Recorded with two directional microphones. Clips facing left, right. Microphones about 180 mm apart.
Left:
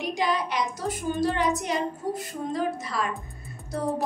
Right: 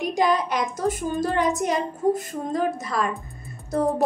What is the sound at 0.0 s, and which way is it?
A woman's voice, 45° right (ahead or behind).